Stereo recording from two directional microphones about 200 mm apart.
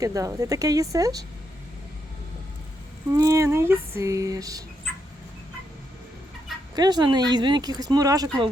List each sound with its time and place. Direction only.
0.0 s female singing: 15° right (ahead or behind)
3.2 s female singing: 15° right (ahead or behind)
6.7 s speech: 20° right (ahead or behind)